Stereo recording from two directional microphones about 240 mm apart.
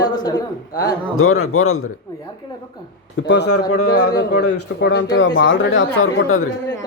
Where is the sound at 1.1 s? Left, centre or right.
Left.